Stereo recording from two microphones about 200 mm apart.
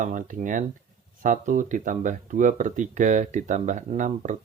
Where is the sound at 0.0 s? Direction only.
40° right (ahead or behind).